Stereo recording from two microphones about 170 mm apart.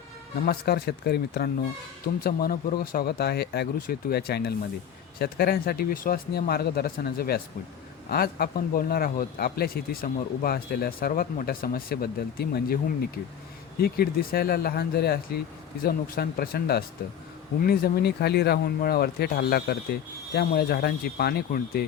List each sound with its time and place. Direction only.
0.4 s a man's voice: 70° left (ahead or behind)
13.8 s a man's voice: 65° left (ahead or behind)